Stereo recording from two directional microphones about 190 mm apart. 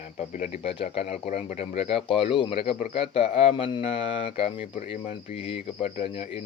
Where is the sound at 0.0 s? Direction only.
40° left (ahead or behind).